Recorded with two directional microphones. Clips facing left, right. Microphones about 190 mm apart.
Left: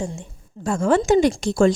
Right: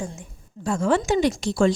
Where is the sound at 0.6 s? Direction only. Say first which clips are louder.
Left 3 dB; 50° left (ahead or behind).